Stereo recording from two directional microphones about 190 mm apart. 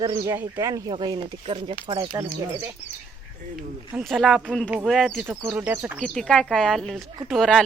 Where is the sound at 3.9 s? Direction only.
5° right (ahead or behind).